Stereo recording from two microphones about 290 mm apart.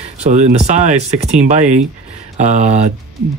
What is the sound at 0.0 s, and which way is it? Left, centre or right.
Speech, right.